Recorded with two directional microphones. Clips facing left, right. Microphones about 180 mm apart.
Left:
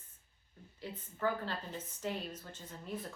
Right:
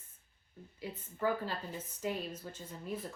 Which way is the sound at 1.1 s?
10° right (ahead or behind).